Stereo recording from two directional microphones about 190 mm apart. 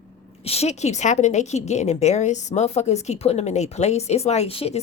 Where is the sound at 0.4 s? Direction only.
35° left (ahead or behind).